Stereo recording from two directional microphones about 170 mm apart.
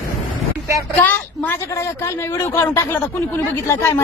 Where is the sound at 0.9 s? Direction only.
10° left (ahead or behind).